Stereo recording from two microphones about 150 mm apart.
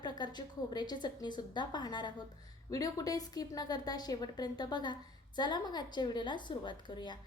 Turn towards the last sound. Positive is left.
turn(degrees=30)  # may be behind; listen again after turning